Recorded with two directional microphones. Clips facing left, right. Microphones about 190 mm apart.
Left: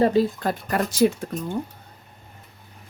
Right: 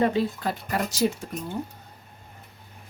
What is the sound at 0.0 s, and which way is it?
Speech, 40° left (ahead or behind).